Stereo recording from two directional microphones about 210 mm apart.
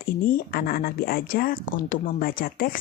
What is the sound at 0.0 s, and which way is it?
Speech, 45° left (ahead or behind).